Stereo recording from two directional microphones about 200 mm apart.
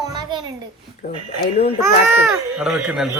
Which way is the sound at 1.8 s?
10° right (ahead or behind).